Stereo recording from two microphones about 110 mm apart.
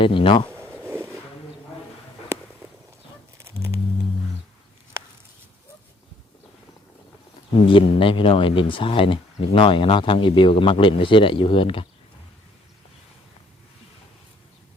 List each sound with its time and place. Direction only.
0.0 s speech: 50° left (ahead or behind)
0.9 s a sound: 25° right (ahead or behind)
7.5 s speech: 50° left (ahead or behind)